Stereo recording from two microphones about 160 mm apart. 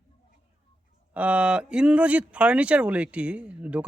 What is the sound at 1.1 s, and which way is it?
Speech, 10° right (ahead or behind).